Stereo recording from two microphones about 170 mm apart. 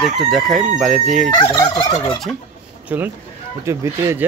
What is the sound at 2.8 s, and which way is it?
Speech, 10° right (ahead or behind).